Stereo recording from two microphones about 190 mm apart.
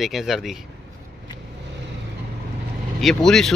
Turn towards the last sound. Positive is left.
turn(degrees=0)  # may be behind; listen again after turning